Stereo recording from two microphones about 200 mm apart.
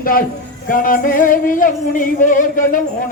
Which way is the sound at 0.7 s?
45° left (ahead or behind).